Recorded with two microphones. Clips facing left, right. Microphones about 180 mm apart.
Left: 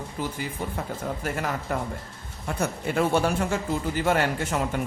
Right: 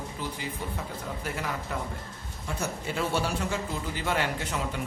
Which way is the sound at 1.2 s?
50° left (ahead or behind).